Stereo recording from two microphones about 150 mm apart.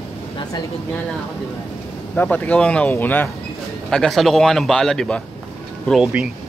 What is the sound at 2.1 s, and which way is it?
Speech, 10° left (ahead or behind).